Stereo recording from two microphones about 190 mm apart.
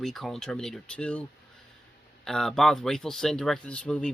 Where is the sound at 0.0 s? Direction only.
Centre (ahead or behind).